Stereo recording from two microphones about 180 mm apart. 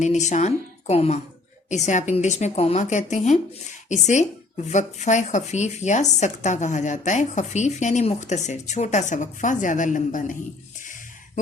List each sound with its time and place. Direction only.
0.0 s speech: 40° left (ahead or behind)